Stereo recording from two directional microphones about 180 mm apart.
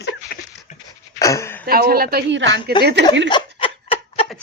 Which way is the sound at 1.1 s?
15° left (ahead or behind).